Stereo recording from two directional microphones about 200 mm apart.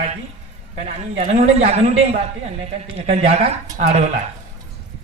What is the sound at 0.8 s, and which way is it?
Speech, 35° right (ahead or behind).